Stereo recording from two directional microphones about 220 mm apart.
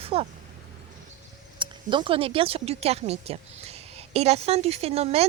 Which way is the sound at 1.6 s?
20° right (ahead or behind).